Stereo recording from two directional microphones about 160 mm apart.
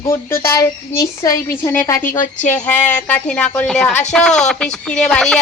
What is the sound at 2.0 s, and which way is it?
Speech, 55° left (ahead or behind).